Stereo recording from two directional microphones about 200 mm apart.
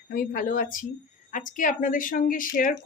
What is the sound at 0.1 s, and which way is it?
A woman's voice, 45° left (ahead or behind).